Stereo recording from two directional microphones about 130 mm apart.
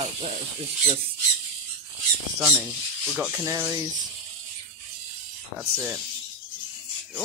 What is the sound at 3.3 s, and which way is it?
Speech, 20° right (ahead or behind).